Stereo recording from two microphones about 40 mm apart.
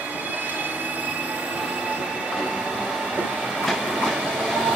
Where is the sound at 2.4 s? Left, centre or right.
Right.